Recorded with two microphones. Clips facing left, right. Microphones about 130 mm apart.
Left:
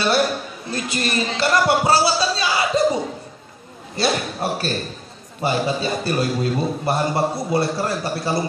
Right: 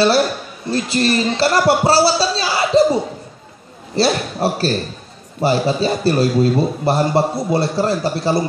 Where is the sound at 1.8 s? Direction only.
30° right (ahead or behind).